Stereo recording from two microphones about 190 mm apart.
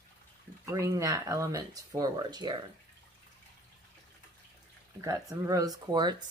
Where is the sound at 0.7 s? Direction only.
15° right (ahead or behind).